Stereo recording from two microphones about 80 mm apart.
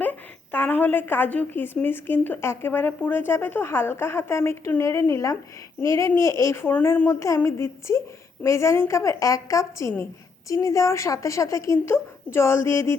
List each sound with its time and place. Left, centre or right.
0.0 s a woman's voice: left